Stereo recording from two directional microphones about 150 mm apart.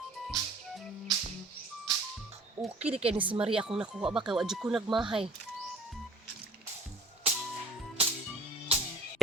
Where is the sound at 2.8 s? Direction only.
10° right (ahead or behind).